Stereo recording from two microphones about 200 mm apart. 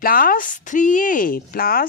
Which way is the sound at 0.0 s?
45° left (ahead or behind).